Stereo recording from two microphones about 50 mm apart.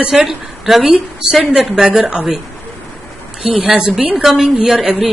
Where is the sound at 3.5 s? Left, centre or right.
Right.